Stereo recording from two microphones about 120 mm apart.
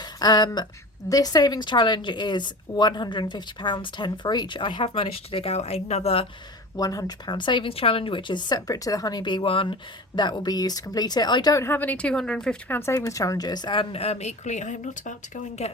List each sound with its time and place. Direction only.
0.0 s a sound: 35° left (ahead or behind)
1.1 s a woman's voice: 35° left (ahead or behind); by 6.2 s 60° left (ahead or behind)
6.7 s a woman's voice: 30° left (ahead or behind); by 9.7 s 50° left (ahead or behind)
10.2 s a woman's voice: 35° left (ahead or behind)
11.6 s speech: 15° left (ahead or behind); by 13.8 s 40° left (ahead or behind)
13.9 s speech: 60° left (ahead or behind); by 15.1 s 90° left
15.6 s speech: 60° left (ahead or behind)